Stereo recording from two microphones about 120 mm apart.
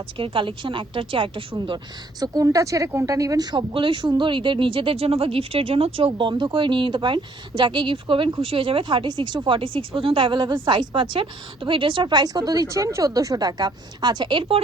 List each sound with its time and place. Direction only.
0.2 s speech: 45° right (ahead or behind)
2.2 s speech: 30° right (ahead or behind)